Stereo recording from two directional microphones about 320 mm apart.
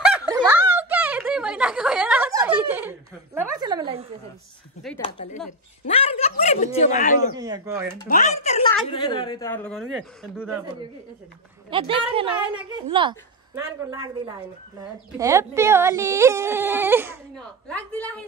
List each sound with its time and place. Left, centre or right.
0.1 s snicker: centre
5.0 s speech: left
7.3 s speech: centre
8.1 s a woman's voice: left; by 10.6 s centre
11.7 s speech: centre
17.6 s a woman's voice: centre